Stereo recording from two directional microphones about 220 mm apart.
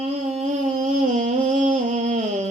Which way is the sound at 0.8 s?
35° right (ahead or behind).